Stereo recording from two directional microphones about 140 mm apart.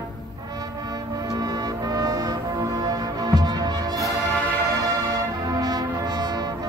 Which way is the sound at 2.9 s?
25° right (ahead or behind).